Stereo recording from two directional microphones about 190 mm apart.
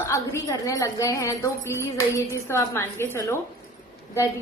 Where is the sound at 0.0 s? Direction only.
15° left (ahead or behind).